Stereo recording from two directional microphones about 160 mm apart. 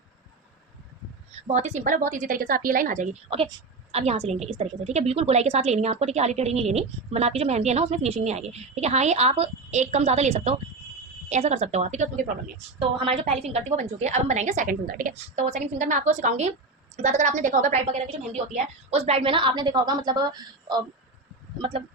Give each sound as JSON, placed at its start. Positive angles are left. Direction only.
{"t": 1.3, "sound": "a woman's voice", "side_deg": -45}
{"t": 3.2, "sound": "a woman's voice", "side_deg": -35}
{"t": 13.3, "sound": "a woman's voice", "side_deg": -40}
{"t": 15.1, "sound": "a woman's voice", "side_deg": -45}
{"t": 21.6, "sound": "a woman's voice", "side_deg": -35}